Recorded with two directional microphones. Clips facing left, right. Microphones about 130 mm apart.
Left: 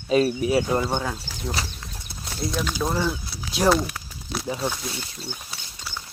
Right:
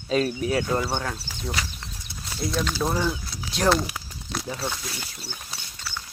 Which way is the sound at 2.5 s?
5° left (ahead or behind).